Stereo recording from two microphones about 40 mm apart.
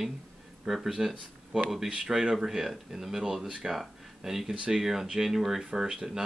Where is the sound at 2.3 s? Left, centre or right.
Centre.